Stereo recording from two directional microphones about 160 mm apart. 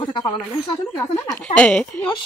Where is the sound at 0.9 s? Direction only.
20° left (ahead or behind).